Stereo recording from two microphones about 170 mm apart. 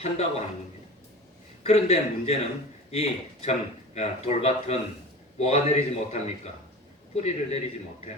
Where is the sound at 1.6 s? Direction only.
40° left (ahead or behind).